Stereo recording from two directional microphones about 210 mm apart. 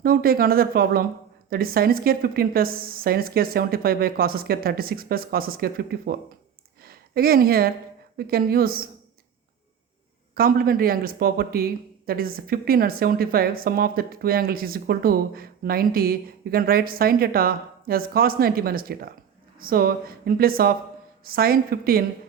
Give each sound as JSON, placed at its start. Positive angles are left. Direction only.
{"t": 0.0, "sound": "speech", "side_deg": -45}
{"t": 10.3, "sound": "speech", "side_deg": -45}